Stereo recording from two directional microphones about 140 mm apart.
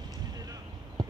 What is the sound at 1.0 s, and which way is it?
Clip-clop, 30° right (ahead or behind).